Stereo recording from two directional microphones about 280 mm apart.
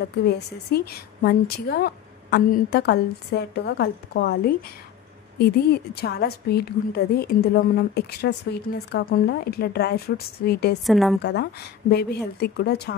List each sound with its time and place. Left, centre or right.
0.7 s a woman's voice: left
10.9 s a woman's voice: centre
11.9 s a woman's voice: left